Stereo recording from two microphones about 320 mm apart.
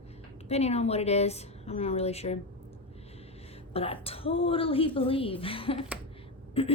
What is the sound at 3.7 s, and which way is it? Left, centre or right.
A woman's voice, centre.